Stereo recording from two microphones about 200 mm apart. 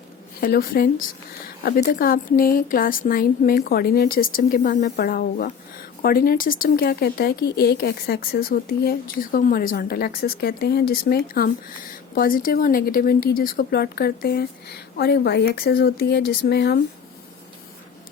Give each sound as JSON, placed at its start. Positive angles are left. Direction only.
{"t": 0.4, "sound": "speech", "side_deg": 45}